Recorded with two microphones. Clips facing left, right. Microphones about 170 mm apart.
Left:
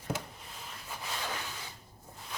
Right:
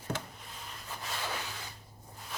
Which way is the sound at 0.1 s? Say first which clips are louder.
Left 1 dB; 10° left (ahead or behind).